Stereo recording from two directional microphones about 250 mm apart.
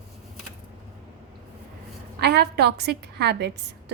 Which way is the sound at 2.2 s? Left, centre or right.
Right.